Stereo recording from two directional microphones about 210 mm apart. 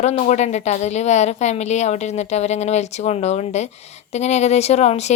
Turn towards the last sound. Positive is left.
turn(degrees=30)  # may be behind; listen again after turning